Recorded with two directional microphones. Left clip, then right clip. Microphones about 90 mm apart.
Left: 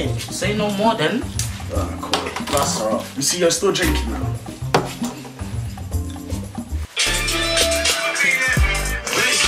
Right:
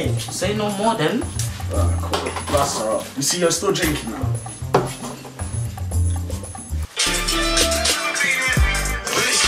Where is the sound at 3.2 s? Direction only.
20° left (ahead or behind).